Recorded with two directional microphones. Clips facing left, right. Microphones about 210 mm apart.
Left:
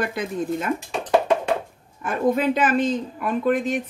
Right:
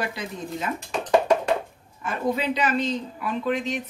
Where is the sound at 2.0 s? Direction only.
50° left (ahead or behind).